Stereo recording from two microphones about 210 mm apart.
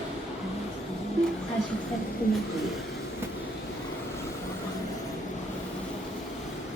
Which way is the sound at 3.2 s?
10° right (ahead or behind).